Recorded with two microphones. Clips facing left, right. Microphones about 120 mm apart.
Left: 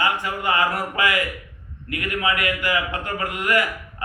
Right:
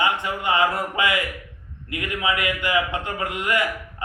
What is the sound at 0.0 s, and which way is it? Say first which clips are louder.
Speech: even; 20° right (ahead or behind).